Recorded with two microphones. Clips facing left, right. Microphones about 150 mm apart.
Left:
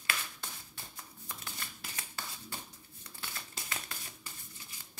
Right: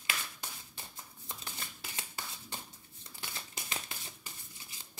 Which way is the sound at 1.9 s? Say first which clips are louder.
Even; 20° right (ahead or behind).